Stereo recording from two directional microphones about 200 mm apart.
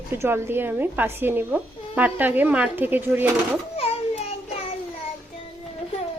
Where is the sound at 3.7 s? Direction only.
30° left (ahead or behind).